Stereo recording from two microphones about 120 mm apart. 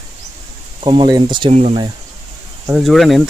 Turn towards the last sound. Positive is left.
turn(degrees=0)  # may be behind; listen again after turning